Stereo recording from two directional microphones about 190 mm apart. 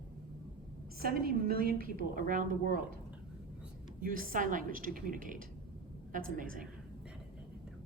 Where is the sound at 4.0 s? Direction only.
50° right (ahead or behind).